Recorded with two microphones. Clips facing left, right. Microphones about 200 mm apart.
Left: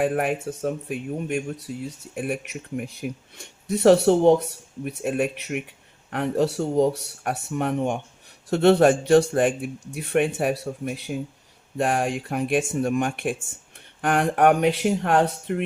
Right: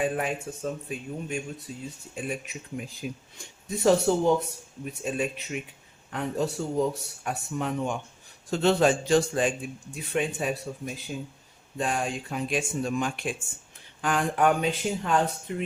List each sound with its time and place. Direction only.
0.0 s speech: 60° left (ahead or behind)